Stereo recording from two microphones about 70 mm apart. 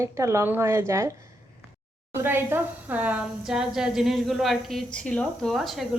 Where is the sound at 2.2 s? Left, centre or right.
Right.